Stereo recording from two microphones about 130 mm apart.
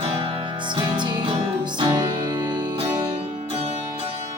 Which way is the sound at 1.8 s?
35° right (ahead or behind).